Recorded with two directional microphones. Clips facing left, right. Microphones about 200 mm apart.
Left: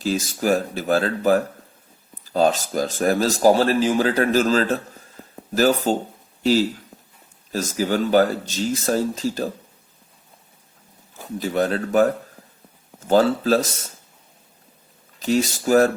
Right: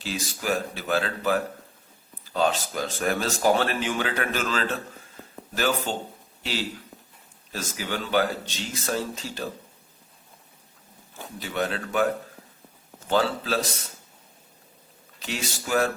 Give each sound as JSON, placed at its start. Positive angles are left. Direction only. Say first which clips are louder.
{"t": 0.0, "sound": "speech", "louder": "left 9 dB", "side_deg": 40}
{"t": 11.3, "sound": "speech", "louder": "left 7 dB", "side_deg": 40}
{"t": 13.1, "sound": "speech", "louder": "left 8 dB", "side_deg": 40}
{"t": 15.2, "sound": "speech", "louder": "left 12 dB", "side_deg": 40}